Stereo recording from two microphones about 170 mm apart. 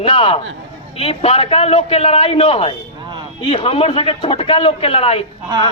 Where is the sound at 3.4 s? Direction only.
35° left (ahead or behind).